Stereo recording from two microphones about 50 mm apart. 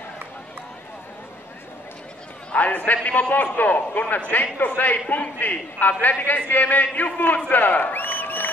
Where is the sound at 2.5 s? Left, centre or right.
Left.